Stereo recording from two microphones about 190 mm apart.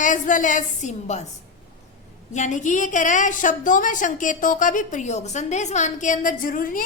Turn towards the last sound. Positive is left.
turn(degrees=45)  # may be behind; listen again after turning